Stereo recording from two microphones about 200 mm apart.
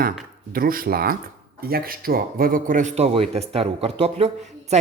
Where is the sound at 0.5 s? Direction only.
45° right (ahead or behind).